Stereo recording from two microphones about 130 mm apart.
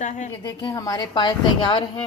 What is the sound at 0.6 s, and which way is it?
A woman's voice, 30° left (ahead or behind).